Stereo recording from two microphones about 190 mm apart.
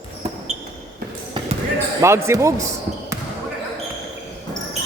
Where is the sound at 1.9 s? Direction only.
15° right (ahead or behind).